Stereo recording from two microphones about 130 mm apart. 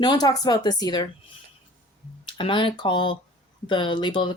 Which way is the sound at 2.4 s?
40° left (ahead or behind).